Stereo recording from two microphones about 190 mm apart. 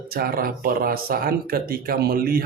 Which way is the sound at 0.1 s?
50° right (ahead or behind).